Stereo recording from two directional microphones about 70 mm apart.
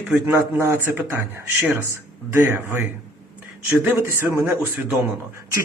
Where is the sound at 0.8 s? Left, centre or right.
Right.